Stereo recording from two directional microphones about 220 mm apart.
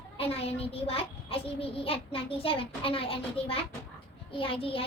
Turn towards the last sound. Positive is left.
turn(degrees=25)  # may be behind; listen again after turning